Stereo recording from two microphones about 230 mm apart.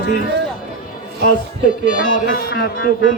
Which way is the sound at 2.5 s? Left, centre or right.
Left.